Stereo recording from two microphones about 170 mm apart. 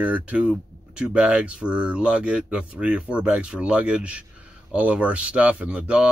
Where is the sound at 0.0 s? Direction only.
10° right (ahead or behind).